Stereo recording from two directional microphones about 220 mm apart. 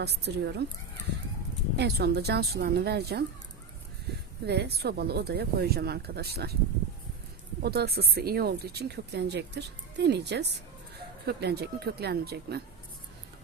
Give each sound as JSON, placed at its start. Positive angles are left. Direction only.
{"t": 0.0, "sound": "speech", "side_deg": -50}
{"t": 1.7, "sound": "speech", "side_deg": -50}
{"t": 4.4, "sound": "speech", "side_deg": -50}
{"t": 7.6, "sound": "speech", "side_deg": -45}